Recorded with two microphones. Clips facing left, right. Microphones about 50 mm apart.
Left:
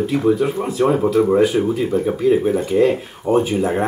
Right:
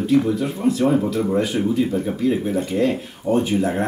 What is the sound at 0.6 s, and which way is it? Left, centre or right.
Speech, left.